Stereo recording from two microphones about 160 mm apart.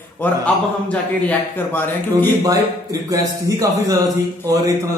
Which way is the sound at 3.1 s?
20° right (ahead or behind).